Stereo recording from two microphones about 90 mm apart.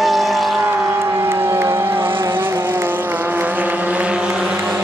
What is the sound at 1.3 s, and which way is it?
Music, 30° right (ahead or behind).